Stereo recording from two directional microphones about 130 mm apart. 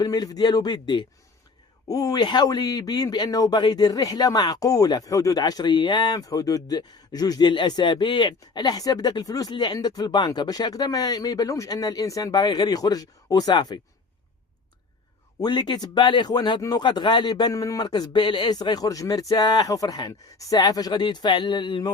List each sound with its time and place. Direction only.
0.0 s speech: 30° left (ahead or behind)
15.4 s speech: 35° left (ahead or behind)